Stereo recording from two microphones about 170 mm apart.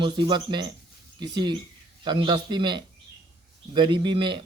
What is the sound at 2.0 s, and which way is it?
Speech, 25° right (ahead or behind).